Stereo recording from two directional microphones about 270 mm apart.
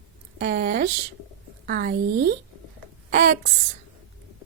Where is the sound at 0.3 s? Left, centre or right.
Right.